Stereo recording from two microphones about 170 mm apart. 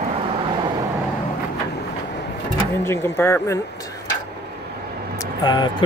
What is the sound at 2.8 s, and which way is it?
Speech, 15° left (ahead or behind).